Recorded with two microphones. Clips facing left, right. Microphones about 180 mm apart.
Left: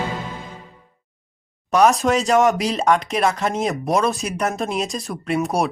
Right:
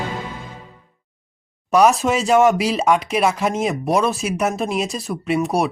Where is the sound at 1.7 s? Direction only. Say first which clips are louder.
Right 1 dB; centre (ahead or behind).